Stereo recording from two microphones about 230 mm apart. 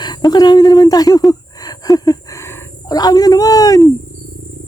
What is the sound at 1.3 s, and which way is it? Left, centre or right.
Wild animals, centre.